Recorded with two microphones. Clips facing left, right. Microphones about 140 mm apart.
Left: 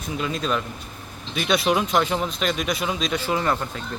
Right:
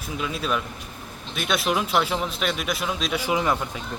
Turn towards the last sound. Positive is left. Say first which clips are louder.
# even
turn(degrees=-10)  # may be behind; listen again after turning